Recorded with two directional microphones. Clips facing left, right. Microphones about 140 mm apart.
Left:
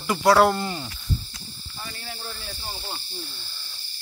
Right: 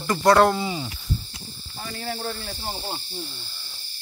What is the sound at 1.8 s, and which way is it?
Speech, 50° right (ahead or behind).